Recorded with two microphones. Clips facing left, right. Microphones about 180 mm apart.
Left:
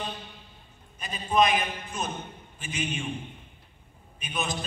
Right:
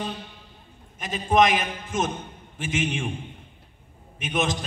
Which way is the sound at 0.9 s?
90° right.